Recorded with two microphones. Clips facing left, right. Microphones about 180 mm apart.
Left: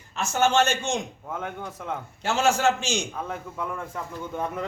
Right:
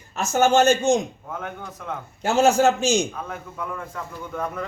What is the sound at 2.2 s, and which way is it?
Speech, 40° right (ahead or behind).